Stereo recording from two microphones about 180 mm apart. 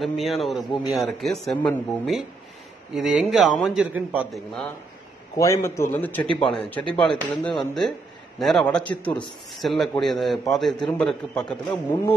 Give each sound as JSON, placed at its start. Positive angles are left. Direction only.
{"t": 0.0, "sound": "a man's voice", "side_deg": 0}
{"t": 5.3, "sound": "a man's voice", "side_deg": 15}